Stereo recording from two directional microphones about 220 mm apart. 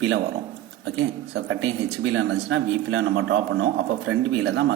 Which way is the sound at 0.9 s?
55° right (ahead or behind).